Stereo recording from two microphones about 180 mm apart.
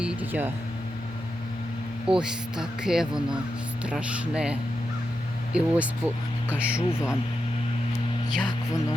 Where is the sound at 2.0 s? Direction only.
5° right (ahead or behind).